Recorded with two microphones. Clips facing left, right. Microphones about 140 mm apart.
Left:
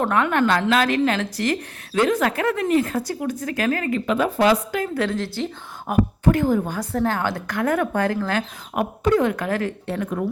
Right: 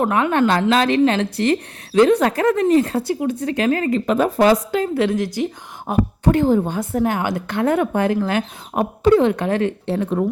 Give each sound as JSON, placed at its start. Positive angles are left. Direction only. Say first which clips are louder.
{"t": 0.0, "sound": "a woman's voice", "louder": "right 3 dB", "side_deg": -20}
{"t": 3.8, "sound": "speech", "louder": "right 4 dB", "side_deg": -40}
{"t": 4.7, "sound": "a woman's voice", "louder": "right 5 dB", "side_deg": -25}
{"t": 5.9, "sound": "a woman's voice", "louder": "right 1 dB", "side_deg": -30}